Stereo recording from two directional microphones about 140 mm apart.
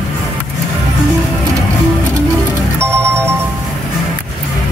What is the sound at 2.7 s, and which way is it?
Music, 20° right (ahead or behind).